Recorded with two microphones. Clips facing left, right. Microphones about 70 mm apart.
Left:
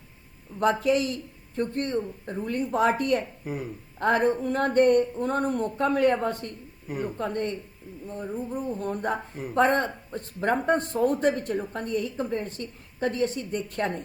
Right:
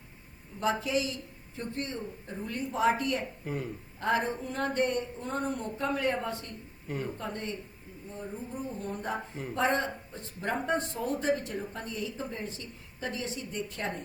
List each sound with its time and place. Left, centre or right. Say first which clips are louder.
0.6 s speech: left 6 dB; left
3.4 s speech: left 2 dB; centre
4.0 s speech: left 7 dB; left
6.8 s a woman's voice: left 4 dB; centre
7.2 s speech: left 8 dB; left
9.1 s speech: left 3 dB; centre
9.6 s speech: left 6 dB; left